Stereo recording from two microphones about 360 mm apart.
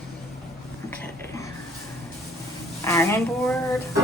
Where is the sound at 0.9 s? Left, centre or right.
Centre.